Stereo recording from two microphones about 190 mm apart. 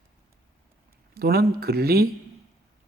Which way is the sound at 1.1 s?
55° right (ahead or behind).